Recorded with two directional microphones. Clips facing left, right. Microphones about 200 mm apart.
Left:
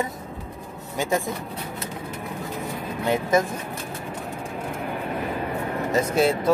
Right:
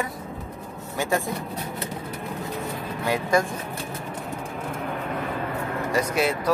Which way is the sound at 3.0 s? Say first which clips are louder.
Left 2 dB; 20° left (ahead or behind).